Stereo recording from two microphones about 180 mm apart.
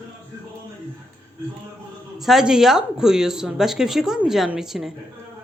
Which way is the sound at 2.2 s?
Centre (ahead or behind).